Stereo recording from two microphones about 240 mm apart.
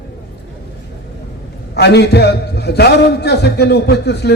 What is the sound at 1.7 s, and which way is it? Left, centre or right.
A man's voice, left.